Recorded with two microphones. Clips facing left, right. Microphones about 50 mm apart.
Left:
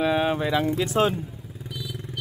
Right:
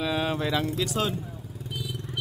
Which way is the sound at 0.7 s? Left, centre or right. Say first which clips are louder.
Left 6 dB; left.